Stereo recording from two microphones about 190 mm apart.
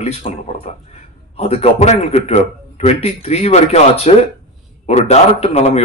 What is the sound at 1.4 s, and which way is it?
A man's voice, 35° left (ahead or behind).